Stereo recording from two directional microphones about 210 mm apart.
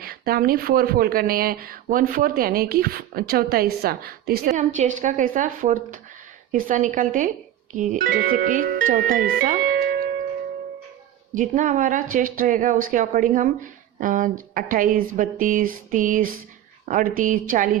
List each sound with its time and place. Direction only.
0.0 s speech: 45° right (ahead or behind)
11.3 s speech: 35° right (ahead or behind)